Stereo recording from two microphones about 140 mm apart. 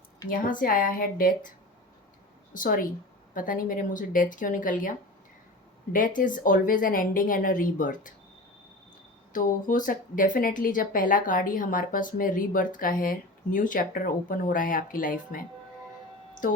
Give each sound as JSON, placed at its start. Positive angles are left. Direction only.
{"t": 0.3, "sound": "speech", "side_deg": 75}
{"t": 2.5, "sound": "speech", "side_deg": 75}
{"t": 9.3, "sound": "speech", "side_deg": 70}